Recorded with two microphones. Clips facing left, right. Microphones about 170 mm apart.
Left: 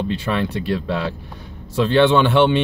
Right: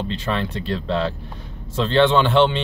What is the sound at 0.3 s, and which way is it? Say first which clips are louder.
Speech: left 2 dB; 10° left (ahead or behind).